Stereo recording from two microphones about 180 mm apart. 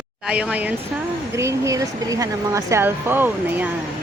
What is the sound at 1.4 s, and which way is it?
Speech, 15° right (ahead or behind).